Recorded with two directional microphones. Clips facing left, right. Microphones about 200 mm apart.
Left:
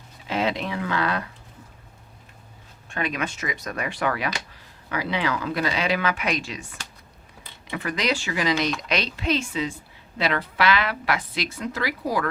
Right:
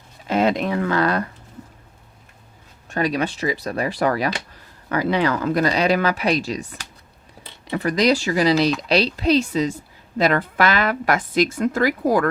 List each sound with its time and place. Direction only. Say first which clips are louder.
0.3 s a woman's voice: right 6 dB; 45° right (ahead or behind)
2.9 s speech: right 6 dB; 35° right (ahead or behind)
7.7 s a woman's voice: right 8 dB; 35° right (ahead or behind)